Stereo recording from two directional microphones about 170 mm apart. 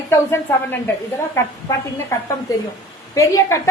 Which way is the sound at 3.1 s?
20° left (ahead or behind).